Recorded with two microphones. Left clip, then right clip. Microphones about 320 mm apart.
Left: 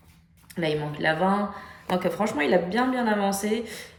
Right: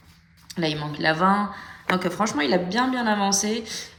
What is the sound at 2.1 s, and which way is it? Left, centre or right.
Speech, right.